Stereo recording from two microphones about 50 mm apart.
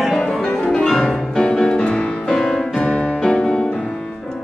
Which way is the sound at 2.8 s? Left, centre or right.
Left.